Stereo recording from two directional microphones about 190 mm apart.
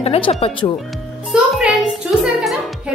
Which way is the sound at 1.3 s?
5° right (ahead or behind).